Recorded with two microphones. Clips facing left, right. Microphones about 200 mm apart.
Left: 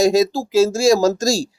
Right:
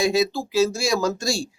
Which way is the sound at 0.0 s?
45° left (ahead or behind).